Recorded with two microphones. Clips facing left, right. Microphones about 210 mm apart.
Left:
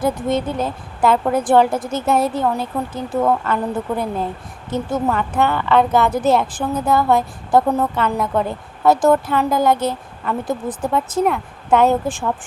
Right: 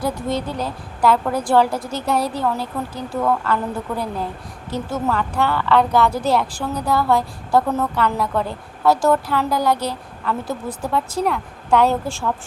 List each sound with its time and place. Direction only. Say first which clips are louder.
0.0 s a woman's voice: left 4 dB; 20° left (ahead or behind)